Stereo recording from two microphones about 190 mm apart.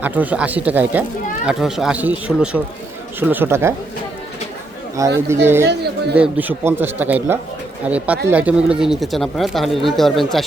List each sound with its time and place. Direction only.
0.0 s speech: 10° right (ahead or behind)
5.0 s speech: 15° right (ahead or behind)
5.6 s speech: 60° right (ahead or behind)
6.1 s speech: 5° right (ahead or behind)